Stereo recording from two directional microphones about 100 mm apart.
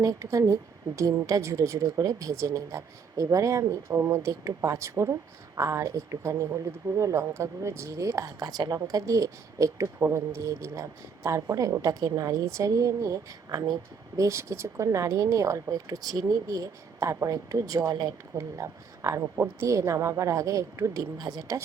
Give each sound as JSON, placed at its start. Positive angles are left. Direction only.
{"t": 0.0, "sound": "speech", "side_deg": -35}